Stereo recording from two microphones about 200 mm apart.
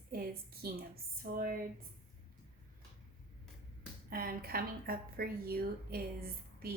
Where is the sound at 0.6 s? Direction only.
45° right (ahead or behind).